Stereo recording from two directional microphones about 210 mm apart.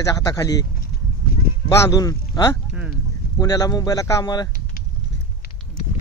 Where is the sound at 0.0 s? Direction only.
15° left (ahead or behind).